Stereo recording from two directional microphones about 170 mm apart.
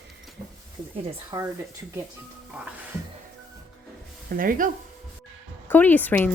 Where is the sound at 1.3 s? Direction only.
20° right (ahead or behind).